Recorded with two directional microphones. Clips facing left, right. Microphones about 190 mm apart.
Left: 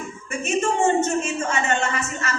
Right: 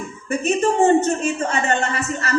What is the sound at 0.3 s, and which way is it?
Speech, 35° right (ahead or behind).